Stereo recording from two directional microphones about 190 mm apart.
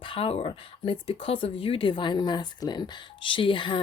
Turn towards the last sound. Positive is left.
turn(degrees=25)  # may be behind; listen again after turning